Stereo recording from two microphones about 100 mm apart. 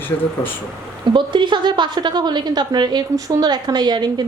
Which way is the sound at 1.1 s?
50° right (ahead or behind).